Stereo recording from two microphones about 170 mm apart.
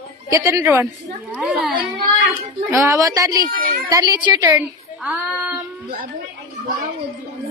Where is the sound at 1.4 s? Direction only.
Centre (ahead or behind).